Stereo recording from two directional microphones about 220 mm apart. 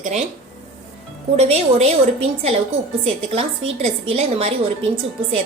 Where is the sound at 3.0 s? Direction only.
25° right (ahead or behind).